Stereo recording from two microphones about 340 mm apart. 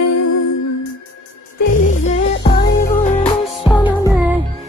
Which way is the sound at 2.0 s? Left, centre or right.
Centre.